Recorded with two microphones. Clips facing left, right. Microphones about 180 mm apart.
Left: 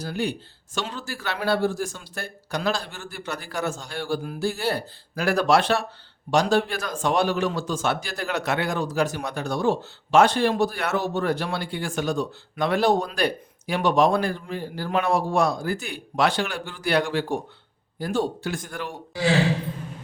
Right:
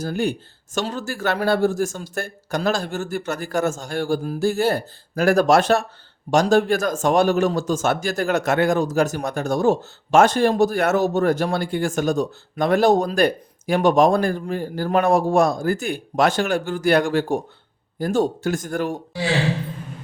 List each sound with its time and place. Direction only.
0.0 s speech: 45° right (ahead or behind)